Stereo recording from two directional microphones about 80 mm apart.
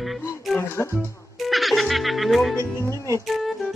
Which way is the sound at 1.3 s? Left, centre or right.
Centre.